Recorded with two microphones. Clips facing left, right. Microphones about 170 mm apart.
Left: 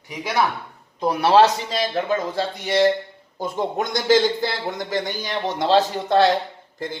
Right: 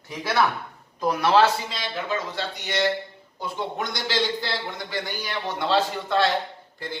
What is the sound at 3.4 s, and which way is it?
A man's voice, 45° left (ahead or behind).